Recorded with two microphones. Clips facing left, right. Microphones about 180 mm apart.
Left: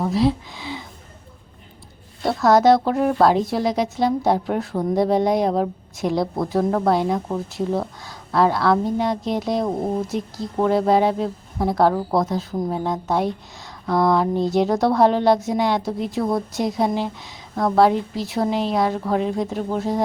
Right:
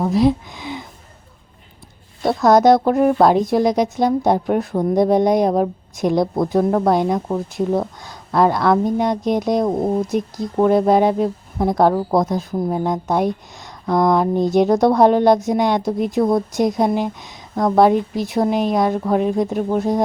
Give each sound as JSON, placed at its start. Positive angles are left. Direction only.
{"t": 0.0, "sound": "speech", "side_deg": -15}
{"t": 2.2, "sound": "a woman's voice", "side_deg": -15}